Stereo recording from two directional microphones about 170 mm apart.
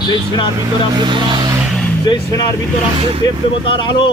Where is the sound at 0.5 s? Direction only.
25° right (ahead or behind).